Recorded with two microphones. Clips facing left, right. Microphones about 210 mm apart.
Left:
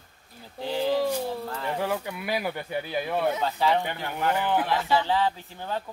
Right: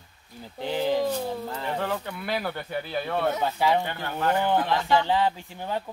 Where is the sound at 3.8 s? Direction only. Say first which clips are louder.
Right 1 dB; 15° left (ahead or behind).